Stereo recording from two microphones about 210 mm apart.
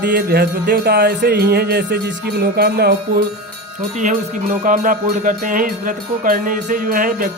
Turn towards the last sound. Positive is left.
turn(degrees=-40)  # may be behind; listen again after turning